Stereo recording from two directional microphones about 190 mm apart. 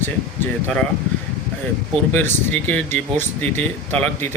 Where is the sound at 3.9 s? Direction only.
5° left (ahead or behind).